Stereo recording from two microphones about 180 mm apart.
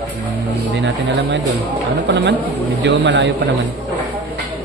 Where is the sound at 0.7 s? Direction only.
90° right.